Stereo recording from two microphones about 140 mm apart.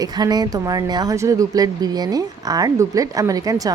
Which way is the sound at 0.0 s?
30° right (ahead or behind).